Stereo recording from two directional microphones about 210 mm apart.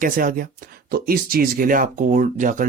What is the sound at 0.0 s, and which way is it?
Speech, 40° right (ahead or behind).